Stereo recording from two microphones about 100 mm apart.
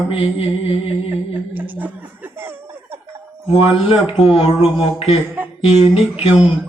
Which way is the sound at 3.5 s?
70° left (ahead or behind).